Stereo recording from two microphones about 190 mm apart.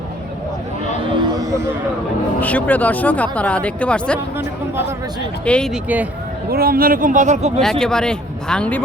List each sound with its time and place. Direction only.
2.4 s speech: 10° left (ahead or behind)
5.5 s speech: 5° left (ahead or behind)
6.5 s speech: 50° right (ahead or behind)
7.6 s speech: 5° left (ahead or behind)